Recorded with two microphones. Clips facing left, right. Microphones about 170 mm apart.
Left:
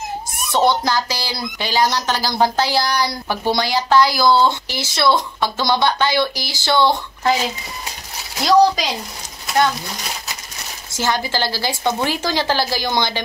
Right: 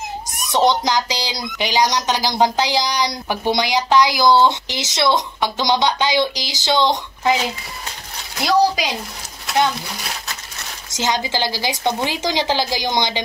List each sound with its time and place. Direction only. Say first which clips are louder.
0.5 s speech: even; 15° right (ahead or behind)
8.4 s speech: left 3 dB; 10° right (ahead or behind)
10.9 s speech: even; 20° right (ahead or behind)